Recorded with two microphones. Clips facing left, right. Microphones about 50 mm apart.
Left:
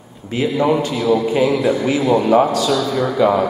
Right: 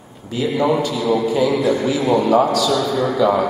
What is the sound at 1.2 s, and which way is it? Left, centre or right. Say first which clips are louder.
A man's voice: left 1 dB; left.